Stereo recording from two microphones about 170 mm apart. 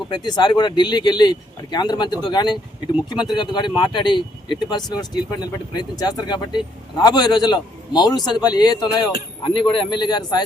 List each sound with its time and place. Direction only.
0.1 s speech: 25° left (ahead or behind)